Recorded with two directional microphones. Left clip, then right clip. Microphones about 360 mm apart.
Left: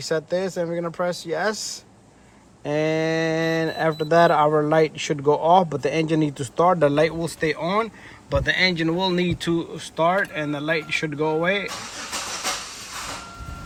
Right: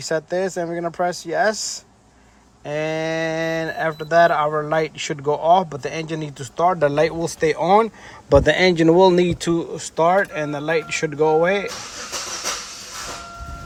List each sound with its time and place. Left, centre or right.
0.1 s speech: centre
2.6 s speech: centre